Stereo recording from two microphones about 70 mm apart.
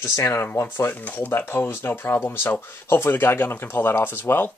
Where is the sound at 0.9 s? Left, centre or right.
Left.